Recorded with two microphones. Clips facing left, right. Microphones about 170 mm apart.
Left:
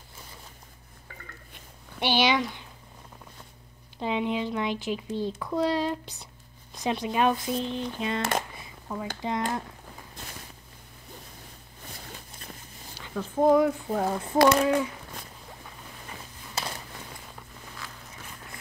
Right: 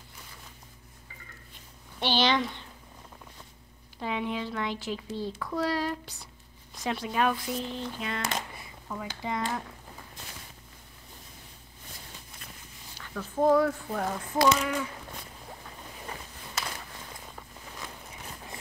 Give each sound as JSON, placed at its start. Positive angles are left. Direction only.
{"t": 2.0, "sound": "speech", "side_deg": 15}
{"t": 4.0, "sound": "speech", "side_deg": 20}
{"t": 8.2, "sound": "speech", "side_deg": 55}
{"t": 8.5, "sound": "a sound", "side_deg": 20}
{"t": 9.2, "sound": "speech", "side_deg": 20}
{"t": 13.0, "sound": "speech", "side_deg": 20}
{"t": 14.4, "sound": "speech", "side_deg": 60}